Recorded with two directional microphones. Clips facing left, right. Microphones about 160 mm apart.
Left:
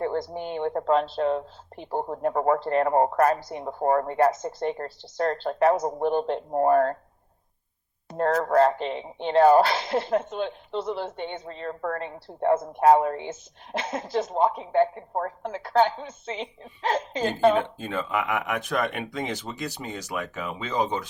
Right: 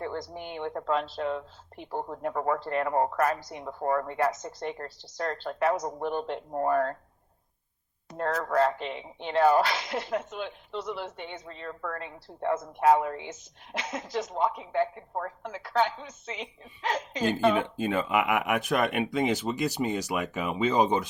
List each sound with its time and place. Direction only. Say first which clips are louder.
0.0 s speech: left 7 dB; 35° left (ahead or behind)
8.3 s speech: left 5 dB; 45° left (ahead or behind)
17.7 s speech: right 2 dB; 10° right (ahead or behind)